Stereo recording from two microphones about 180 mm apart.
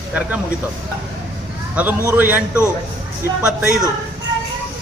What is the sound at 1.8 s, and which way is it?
Speech, 10° right (ahead or behind).